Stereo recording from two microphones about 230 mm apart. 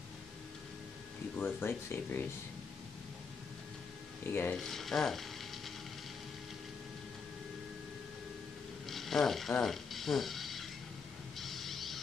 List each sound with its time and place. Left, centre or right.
1.4 s speech: centre
4.3 s speech: centre
8.8 s a sound: centre
11.3 s music: centre